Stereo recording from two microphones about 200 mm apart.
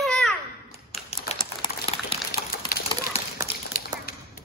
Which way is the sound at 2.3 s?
45° left (ahead or behind).